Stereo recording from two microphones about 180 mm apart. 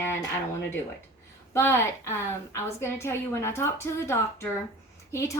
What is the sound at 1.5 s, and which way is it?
A woman's voice, 15° left (ahead or behind).